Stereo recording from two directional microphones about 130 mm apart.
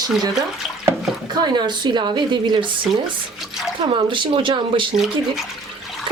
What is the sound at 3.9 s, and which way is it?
Speech, 40° right (ahead or behind).